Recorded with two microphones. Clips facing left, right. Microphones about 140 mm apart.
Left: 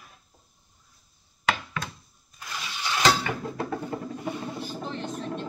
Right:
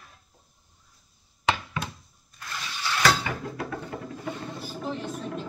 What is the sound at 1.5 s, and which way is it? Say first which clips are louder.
Knock: right 1 dB; 20° right (ahead or behind).